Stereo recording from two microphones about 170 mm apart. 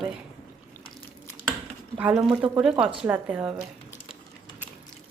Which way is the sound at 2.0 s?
5° right (ahead or behind).